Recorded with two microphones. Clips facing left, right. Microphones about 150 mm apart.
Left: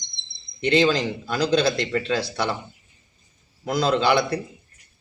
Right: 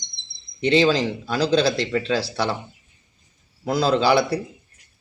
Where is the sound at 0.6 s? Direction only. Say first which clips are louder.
Right 2 dB; centre (ahead or behind).